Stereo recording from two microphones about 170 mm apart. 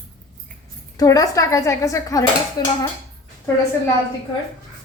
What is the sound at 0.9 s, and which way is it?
A woman's voice, 20° left (ahead or behind).